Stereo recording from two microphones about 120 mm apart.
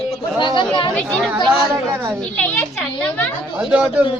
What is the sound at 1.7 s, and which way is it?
Speech, 25° right (ahead or behind).